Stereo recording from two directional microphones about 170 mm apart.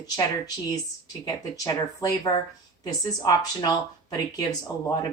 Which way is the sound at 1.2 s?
20° left (ahead or behind).